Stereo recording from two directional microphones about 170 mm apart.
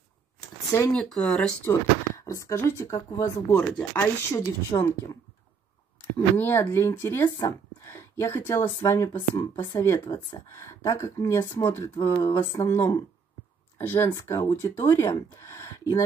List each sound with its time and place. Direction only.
0.9 s speech: 5° left (ahead or behind); by 5.1 s 20° left (ahead or behind)
6.3 s speech: 10° left (ahead or behind)